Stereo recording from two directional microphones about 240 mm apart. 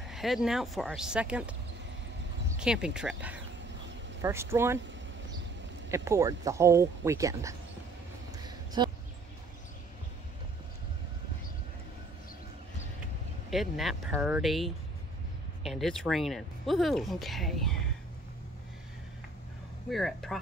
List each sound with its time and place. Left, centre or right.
0.0 s speech: centre
2.6 s speech: centre
5.9 s speech: centre
8.5 s a sound: centre
13.5 s speech: centre
19.9 s speech: centre